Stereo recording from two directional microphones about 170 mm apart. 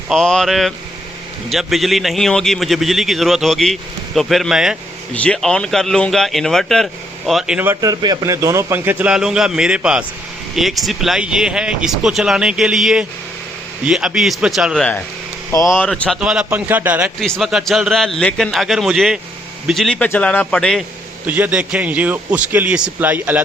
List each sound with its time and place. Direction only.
0.1 s a man's voice: 5° left (ahead or behind)
7.8 s a man's voice: 20° right (ahead or behind); by 14.8 s centre (ahead or behind)
15.5 s a man's voice: 20° left (ahead or behind)
15.9 s a man's voice: 5° right (ahead or behind)
17.2 s a man's voice: centre (ahead or behind)
21.2 s a man's voice: 10° right (ahead or behind)